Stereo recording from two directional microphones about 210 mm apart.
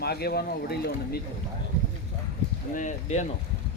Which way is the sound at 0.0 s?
50° left (ahead or behind).